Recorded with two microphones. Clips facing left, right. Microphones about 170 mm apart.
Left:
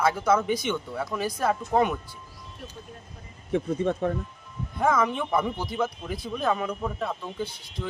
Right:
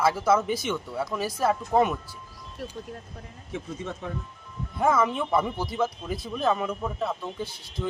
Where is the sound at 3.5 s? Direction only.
55° left (ahead or behind).